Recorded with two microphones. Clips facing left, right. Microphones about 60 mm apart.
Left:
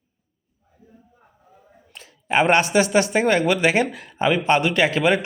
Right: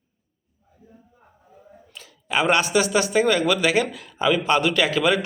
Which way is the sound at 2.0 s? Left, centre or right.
Left.